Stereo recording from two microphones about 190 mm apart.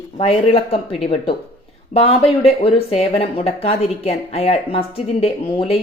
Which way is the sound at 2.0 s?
30° left (ahead or behind).